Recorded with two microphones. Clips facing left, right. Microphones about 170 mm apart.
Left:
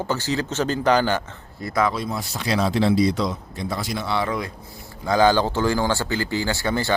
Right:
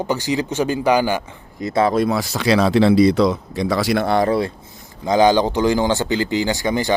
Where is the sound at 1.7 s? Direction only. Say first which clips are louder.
Right 5 dB; 30° right (ahead or behind).